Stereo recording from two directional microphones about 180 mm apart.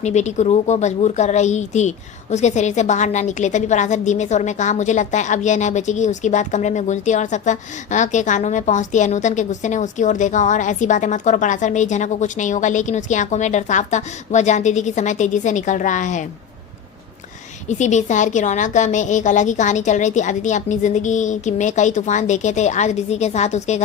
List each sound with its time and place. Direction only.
0.0 s a woman's voice: 40° left (ahead or behind)
17.7 s a woman's voice: 40° left (ahead or behind)